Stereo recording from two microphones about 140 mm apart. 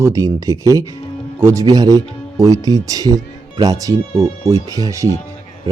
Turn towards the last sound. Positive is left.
turn(degrees=-20)  # may be behind; listen again after turning